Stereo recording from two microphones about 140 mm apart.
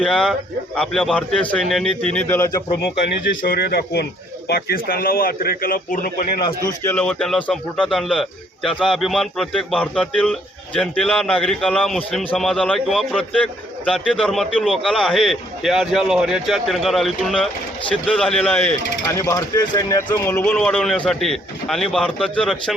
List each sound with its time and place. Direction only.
0.0 s a man's voice: 5° left (ahead or behind)
2.1 s speech: 15° left (ahead or behind)
4.5 s a man's voice: 90° left
6.8 s a man's voice: 10° left (ahead or behind)
19.1 s speech: 25° left (ahead or behind)
20.4 s a man's voice: 5° left (ahead or behind)